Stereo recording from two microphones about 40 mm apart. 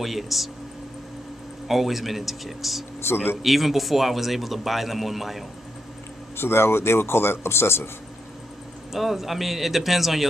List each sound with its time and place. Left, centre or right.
0.0 s speech: centre
1.7 s speech: centre
6.3 s speech: left
8.9 s speech: centre